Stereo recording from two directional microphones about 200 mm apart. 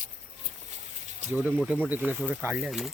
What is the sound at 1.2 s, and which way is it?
Speech, 35° right (ahead or behind).